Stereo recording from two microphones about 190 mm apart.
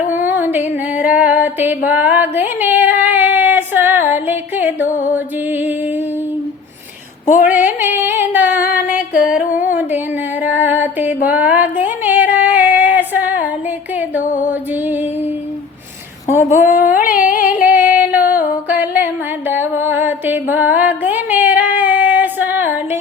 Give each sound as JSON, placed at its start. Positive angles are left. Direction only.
{"t": 0.1, "sound": "music", "side_deg": -10}
{"t": 7.5, "sound": "a sound", "side_deg": -10}
{"t": 9.6, "sound": "humming", "side_deg": -10}
{"t": 10.4, "sound": "music", "side_deg": -10}
{"t": 11.2, "sound": "a sound", "side_deg": -5}
{"t": 14.2, "sound": "music", "side_deg": 45}
{"t": 14.5, "sound": "music", "side_deg": -10}
{"t": 16.5, "sound": "a sound", "side_deg": 45}
{"t": 17.1, "sound": "carnatic music", "side_deg": 45}
{"t": 17.7, "sound": "female singing", "side_deg": -10}
{"t": 18.7, "sound": "music", "side_deg": -10}